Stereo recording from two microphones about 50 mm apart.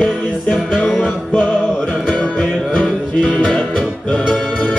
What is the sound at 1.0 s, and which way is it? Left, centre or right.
Music, centre.